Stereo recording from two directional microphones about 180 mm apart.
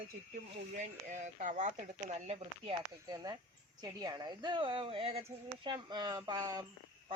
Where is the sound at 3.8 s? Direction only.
20° right (ahead or behind).